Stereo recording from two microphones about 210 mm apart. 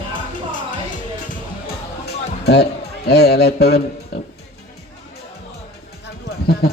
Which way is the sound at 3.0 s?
50° left (ahead or behind).